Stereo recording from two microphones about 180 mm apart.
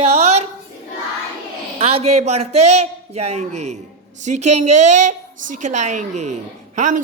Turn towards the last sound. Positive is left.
turn(degrees=-45)  # may be behind; listen again after turning